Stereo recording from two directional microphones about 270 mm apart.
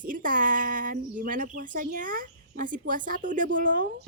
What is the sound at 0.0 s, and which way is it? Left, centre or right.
Speech, right.